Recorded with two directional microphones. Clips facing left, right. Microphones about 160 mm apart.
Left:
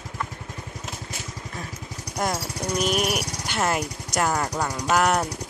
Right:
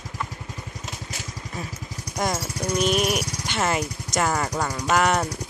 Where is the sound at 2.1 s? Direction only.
5° left (ahead or behind).